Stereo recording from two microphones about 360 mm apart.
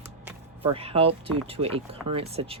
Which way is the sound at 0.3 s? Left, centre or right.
Centre.